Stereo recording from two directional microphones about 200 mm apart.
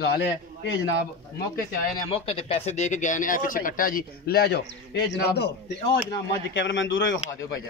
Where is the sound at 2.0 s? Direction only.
30° left (ahead or behind); by 5.5 s 55° left (ahead or behind).